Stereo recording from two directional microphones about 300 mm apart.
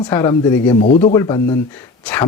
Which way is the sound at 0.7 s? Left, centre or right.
Left.